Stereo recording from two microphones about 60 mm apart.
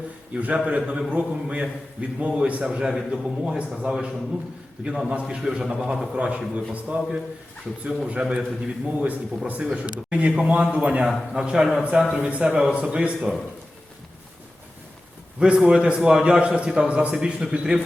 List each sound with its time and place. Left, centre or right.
0.3 s a man's voice: right
2.6 s a man's voice: centre
6.1 s a man's voice: centre
15.4 s a man's voice: centre